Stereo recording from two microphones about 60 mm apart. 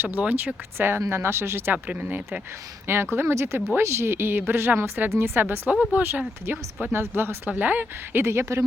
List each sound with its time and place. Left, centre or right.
0.2 s a woman's voice: right
1.7 s speech: right
2.8 s a woman's voice: right
8.2 s speech: right